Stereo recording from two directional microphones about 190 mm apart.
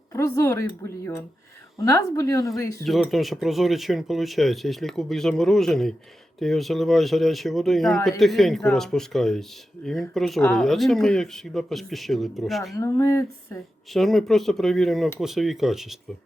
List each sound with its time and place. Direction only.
0.1 s speech: 15° left (ahead or behind)
2.8 s speech: centre (ahead or behind)
12.7 s speech: 15° left (ahead or behind)
13.9 s speech: centre (ahead or behind)